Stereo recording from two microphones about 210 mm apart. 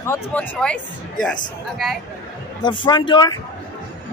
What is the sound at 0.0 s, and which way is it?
Speech, 10° left (ahead or behind).